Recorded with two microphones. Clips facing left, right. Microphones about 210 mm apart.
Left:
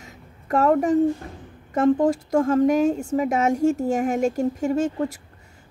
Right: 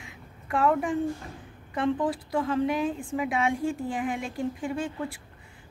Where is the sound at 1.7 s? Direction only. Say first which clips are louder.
Left 8 dB; 45° left (ahead or behind).